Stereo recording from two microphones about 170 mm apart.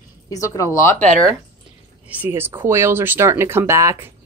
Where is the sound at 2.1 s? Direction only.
10° right (ahead or behind).